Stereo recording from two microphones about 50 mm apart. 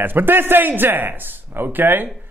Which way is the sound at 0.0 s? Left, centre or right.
Right.